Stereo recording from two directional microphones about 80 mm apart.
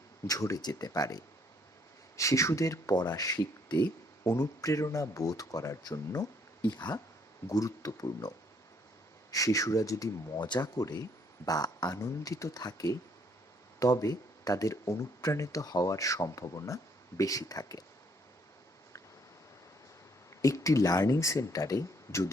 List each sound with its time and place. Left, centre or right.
0.3 s speech: left
2.9 s speech: left
4.2 s speech: left
6.7 s speech: left
7.4 s speech: left
9.3 s speech: left
10.3 s speech: left
20.4 s speech: left